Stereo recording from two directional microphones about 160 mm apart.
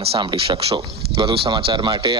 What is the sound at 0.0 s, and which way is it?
Speech, 35° right (ahead or behind).